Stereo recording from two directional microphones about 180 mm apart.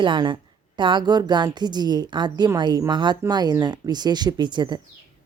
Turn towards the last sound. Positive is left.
turn(degrees=-25)  # may be behind; listen again after turning